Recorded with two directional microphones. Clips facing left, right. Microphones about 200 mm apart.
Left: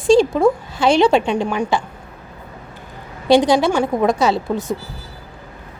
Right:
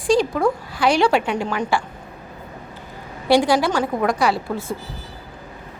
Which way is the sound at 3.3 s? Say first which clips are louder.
Left 3 dB; 20° left (ahead or behind).